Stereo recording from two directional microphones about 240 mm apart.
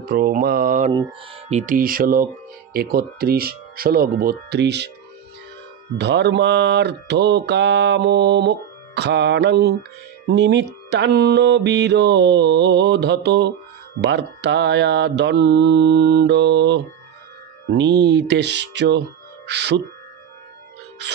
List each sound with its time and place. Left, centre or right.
0.0 s speech: right
5.9 s mantra: right
21.0 s music: right